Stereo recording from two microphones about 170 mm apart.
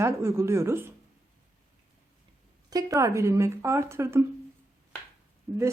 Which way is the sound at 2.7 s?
20° right (ahead or behind).